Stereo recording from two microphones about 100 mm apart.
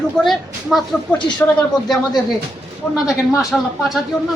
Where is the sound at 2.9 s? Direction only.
5° right (ahead or behind).